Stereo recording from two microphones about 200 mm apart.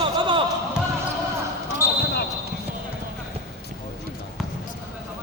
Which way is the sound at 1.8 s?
15° left (ahead or behind).